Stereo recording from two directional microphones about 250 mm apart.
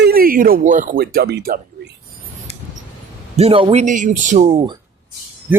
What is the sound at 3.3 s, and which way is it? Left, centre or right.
Speech, right.